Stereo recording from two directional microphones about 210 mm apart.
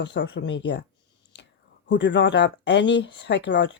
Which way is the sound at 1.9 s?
60° left (ahead or behind).